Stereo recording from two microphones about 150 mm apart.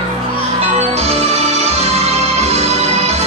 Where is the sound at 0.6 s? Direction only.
45° right (ahead or behind).